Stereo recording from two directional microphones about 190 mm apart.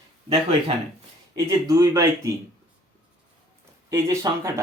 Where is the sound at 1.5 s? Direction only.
15° right (ahead or behind).